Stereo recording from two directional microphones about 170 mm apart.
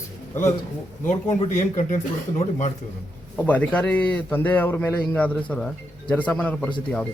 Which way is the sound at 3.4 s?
10° left (ahead or behind).